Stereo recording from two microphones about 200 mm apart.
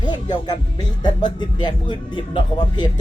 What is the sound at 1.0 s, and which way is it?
Speech, 20° left (ahead or behind).